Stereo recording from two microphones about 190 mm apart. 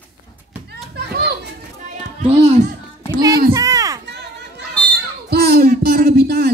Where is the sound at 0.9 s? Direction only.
60° right (ahead or behind).